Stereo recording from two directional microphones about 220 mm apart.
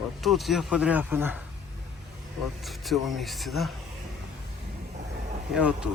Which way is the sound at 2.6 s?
Centre (ahead or behind).